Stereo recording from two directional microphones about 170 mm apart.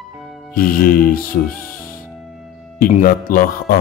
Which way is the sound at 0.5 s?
55° left (ahead or behind).